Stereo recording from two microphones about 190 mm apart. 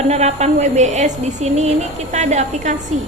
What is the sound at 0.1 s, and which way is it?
A woman's voice, 35° right (ahead or behind).